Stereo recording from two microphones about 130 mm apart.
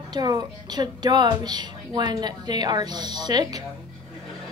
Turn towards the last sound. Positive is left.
turn(degrees=-30)  # may be behind; listen again after turning